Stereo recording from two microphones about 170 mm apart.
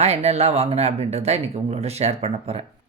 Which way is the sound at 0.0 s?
40° right (ahead or behind).